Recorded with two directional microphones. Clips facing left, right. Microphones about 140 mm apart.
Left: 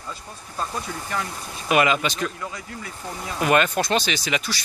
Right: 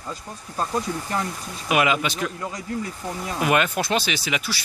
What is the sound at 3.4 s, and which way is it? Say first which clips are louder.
Speech: left 2 dB; 10° right (ahead or behind).